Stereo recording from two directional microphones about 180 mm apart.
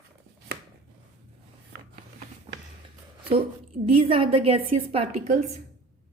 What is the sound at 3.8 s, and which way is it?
A woman's voice, 30° right (ahead or behind).